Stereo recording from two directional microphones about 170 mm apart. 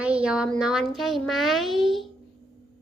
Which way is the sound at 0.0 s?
5° right (ahead or behind).